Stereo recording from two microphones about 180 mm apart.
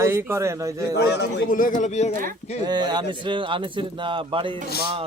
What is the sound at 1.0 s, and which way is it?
Speech, 70° left (ahead or behind).